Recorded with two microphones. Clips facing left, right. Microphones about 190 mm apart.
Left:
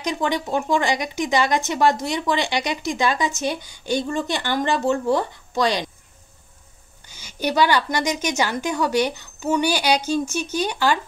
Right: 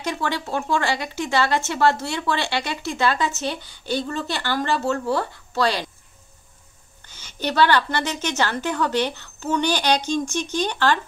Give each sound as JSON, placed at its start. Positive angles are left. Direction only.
{"t": 0.0, "sound": "speech", "side_deg": 15}
{"t": 7.1, "sound": "speech", "side_deg": 10}